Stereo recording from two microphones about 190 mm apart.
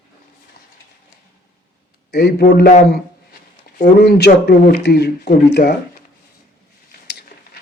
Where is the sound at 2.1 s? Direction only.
60° left (ahead or behind).